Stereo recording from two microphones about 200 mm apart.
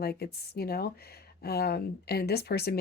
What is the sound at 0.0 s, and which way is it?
Speech, 50° left (ahead or behind).